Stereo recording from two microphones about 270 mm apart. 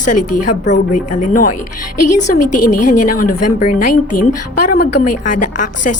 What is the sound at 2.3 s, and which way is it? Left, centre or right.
Speech, left.